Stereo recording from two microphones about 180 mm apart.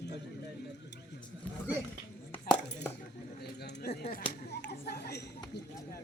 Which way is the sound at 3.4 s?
65° left (ahead or behind).